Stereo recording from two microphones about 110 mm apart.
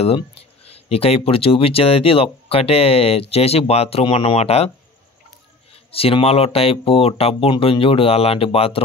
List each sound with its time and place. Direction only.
0.7 s speech: 65° left (ahead or behind)
5.9 s speech: 60° left (ahead or behind)